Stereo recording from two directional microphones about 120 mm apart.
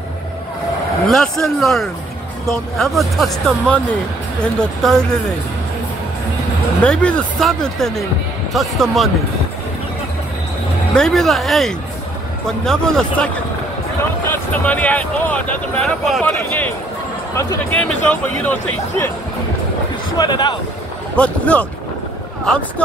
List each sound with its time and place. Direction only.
1.0 s speech: 5° left (ahead or behind)
6.8 s speech: 10° left (ahead or behind)
11.0 s speech: 5° left (ahead or behind)
17.7 s speech: 15° left (ahead or behind)
20.2 s speech: 35° left (ahead or behind)
21.2 s speech: 10° left (ahead or behind)